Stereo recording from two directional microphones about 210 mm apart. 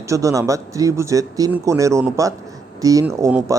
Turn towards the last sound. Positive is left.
turn(degrees=-15)  # may be behind; listen again after turning